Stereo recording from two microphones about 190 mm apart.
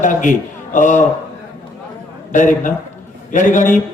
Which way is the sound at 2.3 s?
40° left (ahead or behind).